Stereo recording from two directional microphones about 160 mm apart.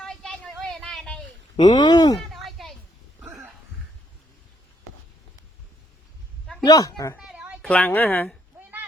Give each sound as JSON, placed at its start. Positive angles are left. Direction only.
{"t": 0.0, "sound": "vehicle", "side_deg": 5}
{"t": 1.5, "sound": "speech", "side_deg": 25}
{"t": 2.3, "sound": "a sound", "side_deg": 0}
{"t": 6.7, "sound": "speech", "side_deg": 25}
{"t": 7.2, "sound": "a sound", "side_deg": -5}
{"t": 7.6, "sound": "speech", "side_deg": 5}